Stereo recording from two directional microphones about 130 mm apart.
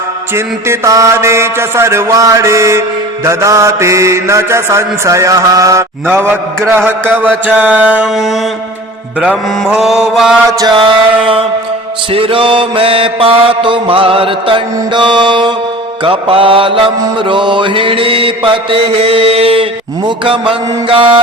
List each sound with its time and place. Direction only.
0.3 s mantra: 20° right (ahead or behind)
6.7 s mantra: 15° right (ahead or behind)
10.8 s mantra: 45° right (ahead or behind)